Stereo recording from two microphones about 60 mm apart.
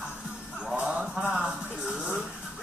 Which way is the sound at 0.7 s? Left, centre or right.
Centre.